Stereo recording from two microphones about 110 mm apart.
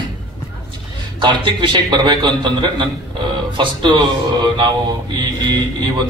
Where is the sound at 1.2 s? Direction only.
45° right (ahead or behind).